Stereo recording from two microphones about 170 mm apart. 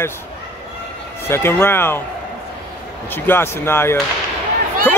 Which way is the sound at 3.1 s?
10° left (ahead or behind).